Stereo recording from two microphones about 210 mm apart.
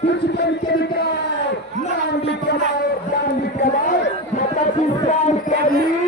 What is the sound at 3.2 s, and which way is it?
Speech, 50° left (ahead or behind).